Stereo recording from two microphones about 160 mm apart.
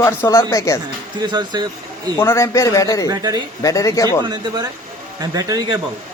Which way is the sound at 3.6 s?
20° left (ahead or behind).